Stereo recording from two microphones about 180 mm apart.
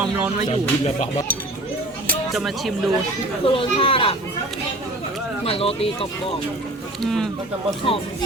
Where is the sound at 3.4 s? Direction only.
30° left (ahead or behind).